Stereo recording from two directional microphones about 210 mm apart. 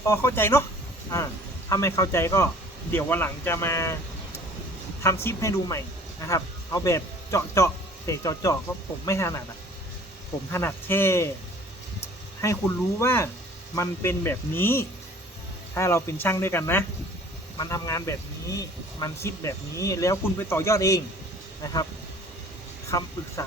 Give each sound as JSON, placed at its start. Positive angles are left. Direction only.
{"t": 0.0, "sound": "speech", "side_deg": 15}
{"t": 1.7, "sound": "speech", "side_deg": 15}
{"t": 5.0, "sound": "speech", "side_deg": 15}
{"t": 10.5, "sound": "speech", "side_deg": 10}
{"t": 12.4, "sound": "speech", "side_deg": 15}
{"t": 22.9, "sound": "speech", "side_deg": 15}